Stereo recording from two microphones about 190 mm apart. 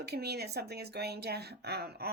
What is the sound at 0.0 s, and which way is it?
Speech, 60° right (ahead or behind).